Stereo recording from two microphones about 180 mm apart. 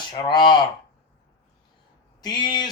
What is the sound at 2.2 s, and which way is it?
Speech, 25° left (ahead or behind).